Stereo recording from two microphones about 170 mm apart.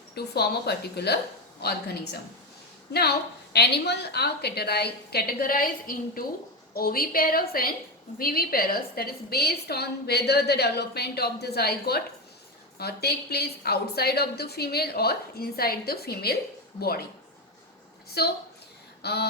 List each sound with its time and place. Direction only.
0.1 s a woman's voice: 70° left (ahead or behind)
3.5 s a woman's voice: 75° left (ahead or behind)
18.2 s a woman's voice: 70° left (ahead or behind)